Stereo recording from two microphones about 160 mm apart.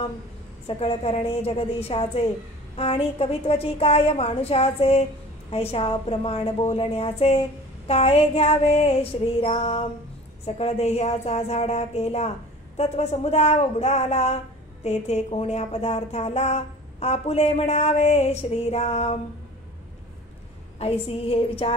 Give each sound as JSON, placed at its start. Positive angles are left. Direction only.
{"t": 0.7, "sound": "a woman's voice", "side_deg": 40}
{"t": 20.8, "sound": "speech", "side_deg": 35}